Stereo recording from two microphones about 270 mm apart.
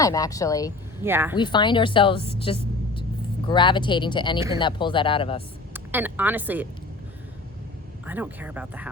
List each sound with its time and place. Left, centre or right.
0.0 s speech: centre
1.0 s speech: centre
1.4 s a woman's voice: centre
5.7 s a woman's voice: centre
8.0 s speech: centre